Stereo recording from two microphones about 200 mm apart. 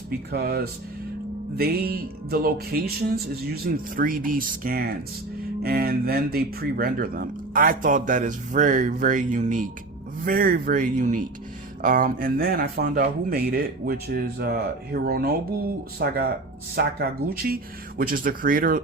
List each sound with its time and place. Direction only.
0.3 s speech: 50° right (ahead or behind)